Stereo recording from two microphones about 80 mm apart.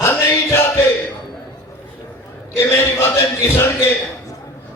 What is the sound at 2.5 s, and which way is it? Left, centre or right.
Music, left.